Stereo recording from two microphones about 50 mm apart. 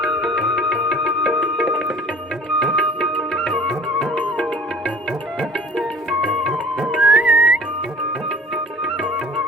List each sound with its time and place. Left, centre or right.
0.3 s music: centre
0.9 s music: centre
2.7 s music: left
5.7 s music: centre
7.0 s whistling: right